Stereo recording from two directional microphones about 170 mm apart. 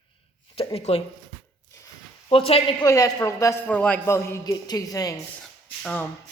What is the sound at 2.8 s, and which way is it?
A man's voice, 20° left (ahead or behind).